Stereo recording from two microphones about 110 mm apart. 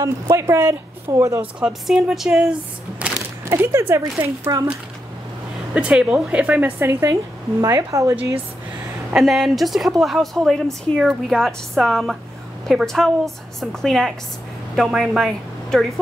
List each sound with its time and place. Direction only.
0.0 s speech: 25° right (ahead or behind)
1.4 s a woman's voice: 5° right (ahead or behind)
3.0 s music: 10° right (ahead or behind)
3.4 s speech: 20° right (ahead or behind)
4.2 s speech: 30° right (ahead or behind)
5.8 s speech: 10° right (ahead or behind); by 8.2 s 30° right (ahead or behind)
9.1 s a woman's voice: centre (ahead or behind)